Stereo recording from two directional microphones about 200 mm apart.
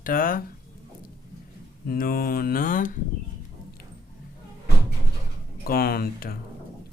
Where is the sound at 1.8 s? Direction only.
45° left (ahead or behind).